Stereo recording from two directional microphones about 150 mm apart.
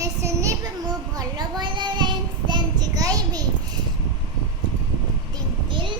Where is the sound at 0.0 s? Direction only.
20° right (ahead or behind).